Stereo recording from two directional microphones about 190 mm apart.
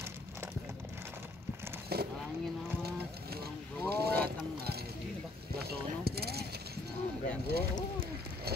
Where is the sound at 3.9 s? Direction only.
55° right (ahead or behind).